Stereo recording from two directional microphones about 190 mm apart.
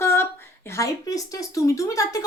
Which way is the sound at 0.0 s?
15° left (ahead or behind).